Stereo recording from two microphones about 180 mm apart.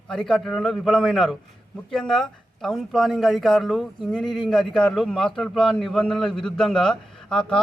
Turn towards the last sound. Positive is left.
turn(degrees=5)  # may be behind; listen again after turning